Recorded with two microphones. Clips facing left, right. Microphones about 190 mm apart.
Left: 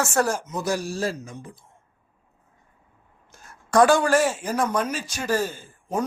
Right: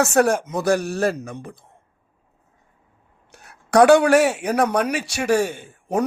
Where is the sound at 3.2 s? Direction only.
65° right (ahead or behind).